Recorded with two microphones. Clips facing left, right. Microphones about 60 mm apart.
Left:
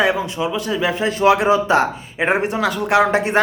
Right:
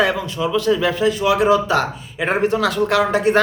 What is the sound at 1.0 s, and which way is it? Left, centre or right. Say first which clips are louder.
A man's voice: left 5 dB; left.